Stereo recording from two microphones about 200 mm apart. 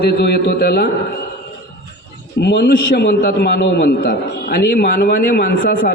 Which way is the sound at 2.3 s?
55° left (ahead or behind).